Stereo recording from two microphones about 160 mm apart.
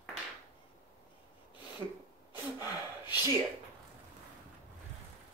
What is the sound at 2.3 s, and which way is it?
Gasp, 25° left (ahead or behind).